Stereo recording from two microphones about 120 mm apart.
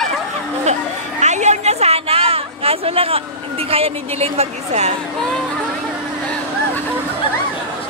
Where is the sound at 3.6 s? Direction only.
55° right (ahead or behind).